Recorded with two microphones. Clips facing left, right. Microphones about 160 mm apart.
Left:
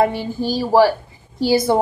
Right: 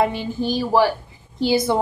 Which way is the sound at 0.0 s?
35° left (ahead or behind).